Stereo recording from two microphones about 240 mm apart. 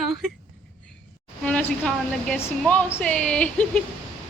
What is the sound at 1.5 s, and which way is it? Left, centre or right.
A woman's voice, centre.